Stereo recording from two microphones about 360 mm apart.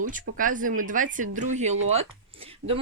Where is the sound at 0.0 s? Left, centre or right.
Right.